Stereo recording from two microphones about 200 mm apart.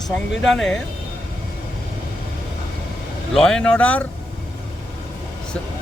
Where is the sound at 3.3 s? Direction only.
Centre (ahead or behind).